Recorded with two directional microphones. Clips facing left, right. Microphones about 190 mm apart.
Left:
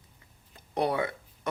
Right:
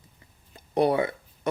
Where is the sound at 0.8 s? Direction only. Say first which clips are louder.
Right 4 dB; 25° right (ahead or behind).